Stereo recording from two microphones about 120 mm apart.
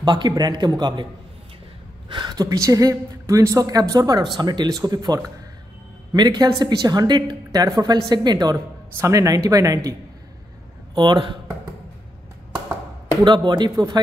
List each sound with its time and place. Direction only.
0.0 s a woman's voice: 35° right (ahead or behind)
2.0 s a woman's voice: 40° right (ahead or behind)
11.0 s a woman's voice: 40° right (ahead or behind)
13.2 s a woman's voice: 40° right (ahead or behind)